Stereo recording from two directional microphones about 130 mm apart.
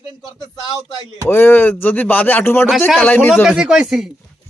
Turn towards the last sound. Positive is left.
turn(degrees=-5)  # may be behind; listen again after turning